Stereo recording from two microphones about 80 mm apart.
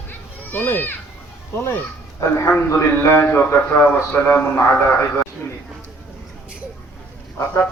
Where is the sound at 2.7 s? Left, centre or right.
Left.